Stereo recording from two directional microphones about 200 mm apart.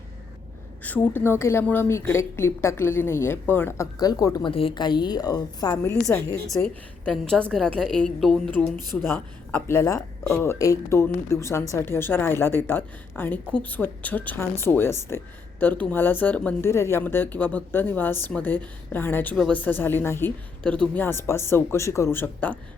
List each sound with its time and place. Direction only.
0.9 s a woman's voice: 10° left (ahead or behind)
6.5 s a woman's voice: 5° left (ahead or behind)